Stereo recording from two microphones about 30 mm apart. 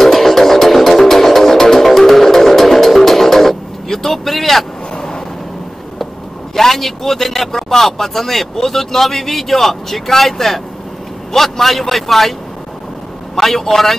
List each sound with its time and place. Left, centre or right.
0.0 s music: centre
4.9 s vehicle: left
6.5 s a man's voice: centre
13.4 s a man's voice: centre